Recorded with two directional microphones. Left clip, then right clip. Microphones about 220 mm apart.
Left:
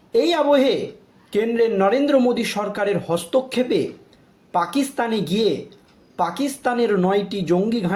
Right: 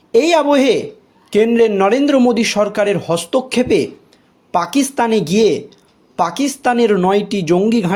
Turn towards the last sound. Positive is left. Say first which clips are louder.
# right 6 dB
turn(degrees=-40)  # may be behind; listen again after turning